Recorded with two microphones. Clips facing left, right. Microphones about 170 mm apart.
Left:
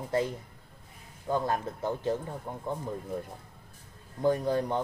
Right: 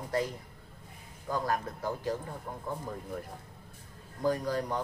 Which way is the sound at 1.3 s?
25° left (ahead or behind).